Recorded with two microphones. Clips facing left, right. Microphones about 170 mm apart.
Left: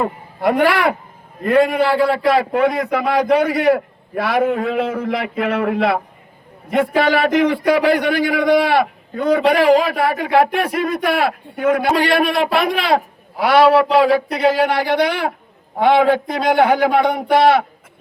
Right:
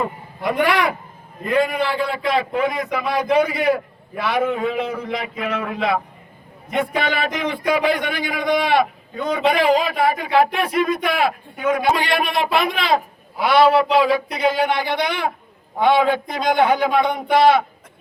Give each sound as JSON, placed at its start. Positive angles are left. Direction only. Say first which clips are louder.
{"t": 0.0, "sound": "a man's voice", "louder": "left 5 dB", "side_deg": 65}
{"t": 16.2, "sound": "speech", "louder": "left 3 dB", "side_deg": 35}
{"t": 16.6, "sound": "a man's voice", "louder": "left 3 dB", "side_deg": 65}